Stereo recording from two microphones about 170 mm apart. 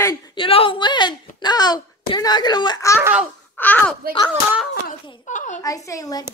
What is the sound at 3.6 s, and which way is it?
Speech, 10° left (ahead or behind).